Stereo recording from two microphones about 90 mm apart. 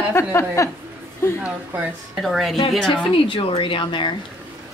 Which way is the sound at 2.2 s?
Centre (ahead or behind).